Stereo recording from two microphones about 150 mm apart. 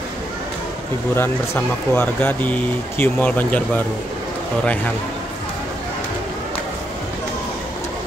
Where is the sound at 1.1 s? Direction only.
15° left (ahead or behind).